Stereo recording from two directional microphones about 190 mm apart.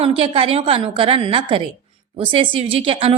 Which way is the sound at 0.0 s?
30° right (ahead or behind).